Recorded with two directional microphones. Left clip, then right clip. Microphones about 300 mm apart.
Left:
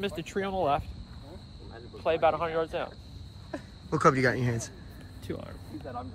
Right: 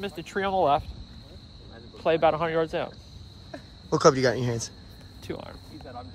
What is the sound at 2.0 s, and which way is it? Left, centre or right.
Speech, right.